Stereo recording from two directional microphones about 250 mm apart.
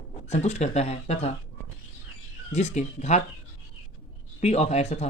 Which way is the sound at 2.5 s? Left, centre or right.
Left.